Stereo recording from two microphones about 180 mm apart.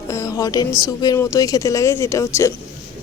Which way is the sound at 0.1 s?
15° left (ahead or behind).